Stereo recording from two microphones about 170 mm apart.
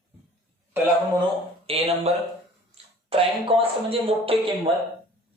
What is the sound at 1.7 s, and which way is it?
Speech, 35° right (ahead or behind).